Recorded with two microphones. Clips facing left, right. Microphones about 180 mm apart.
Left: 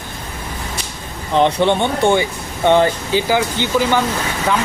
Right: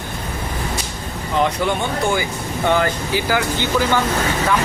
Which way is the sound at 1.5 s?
25° left (ahead or behind).